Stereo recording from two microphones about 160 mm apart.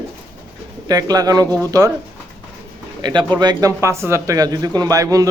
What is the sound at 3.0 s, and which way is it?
A man's voice, 25° right (ahead or behind).